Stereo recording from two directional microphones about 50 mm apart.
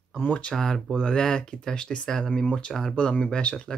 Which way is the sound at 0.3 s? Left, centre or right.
Left.